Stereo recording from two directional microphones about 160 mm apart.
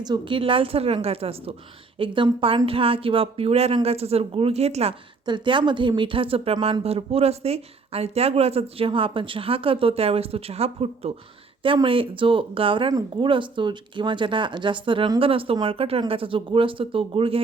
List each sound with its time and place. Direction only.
0.0 s speech: 30° right (ahead or behind)
5.2 s a woman's voice: 30° right (ahead or behind)